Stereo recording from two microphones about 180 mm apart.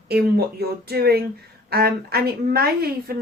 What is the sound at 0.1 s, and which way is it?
A woman's voice, 60° right (ahead or behind).